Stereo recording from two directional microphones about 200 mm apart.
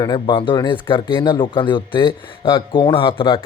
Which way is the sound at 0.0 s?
20° left (ahead or behind).